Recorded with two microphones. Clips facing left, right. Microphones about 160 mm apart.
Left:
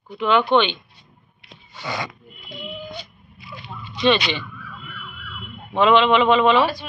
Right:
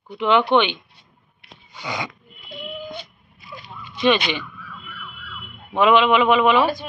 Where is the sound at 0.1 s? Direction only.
20° right (ahead or behind).